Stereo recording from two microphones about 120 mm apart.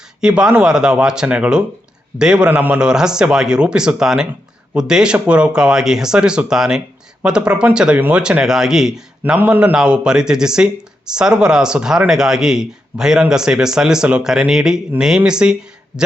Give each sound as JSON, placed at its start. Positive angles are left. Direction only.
{"t": 0.2, "sound": "a man's voice", "side_deg": -5}